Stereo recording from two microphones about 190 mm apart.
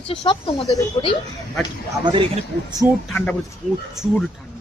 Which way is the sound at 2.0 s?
25° right (ahead or behind).